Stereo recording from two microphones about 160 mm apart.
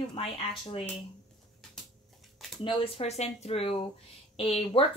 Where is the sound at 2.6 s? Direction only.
35° left (ahead or behind).